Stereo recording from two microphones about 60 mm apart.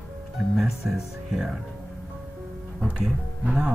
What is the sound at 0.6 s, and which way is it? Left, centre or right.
Speech, centre.